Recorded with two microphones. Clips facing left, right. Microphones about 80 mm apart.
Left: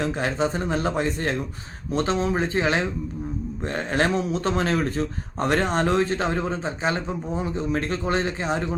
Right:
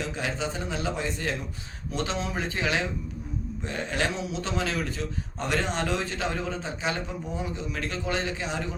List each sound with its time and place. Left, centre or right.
0.0 s speech: left